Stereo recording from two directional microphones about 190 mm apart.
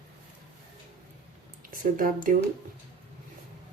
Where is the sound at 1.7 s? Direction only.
45° right (ahead or behind).